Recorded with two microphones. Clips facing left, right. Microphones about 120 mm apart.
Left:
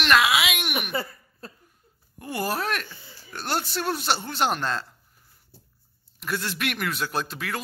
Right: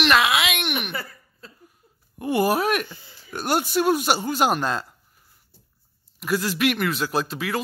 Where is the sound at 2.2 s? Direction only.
15° right (ahead or behind).